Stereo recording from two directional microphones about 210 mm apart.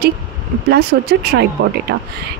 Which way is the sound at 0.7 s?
50° right (ahead or behind).